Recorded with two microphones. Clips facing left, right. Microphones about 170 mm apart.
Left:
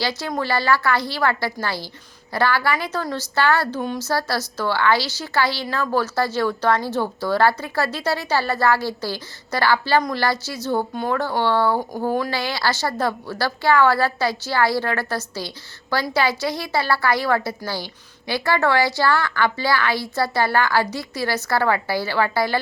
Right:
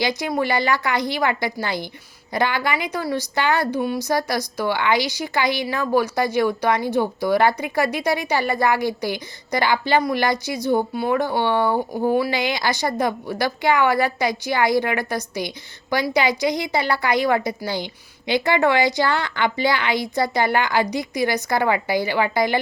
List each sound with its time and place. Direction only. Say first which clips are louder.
0.0 s a woman's voice: right 3 dB; 15° right (ahead or behind)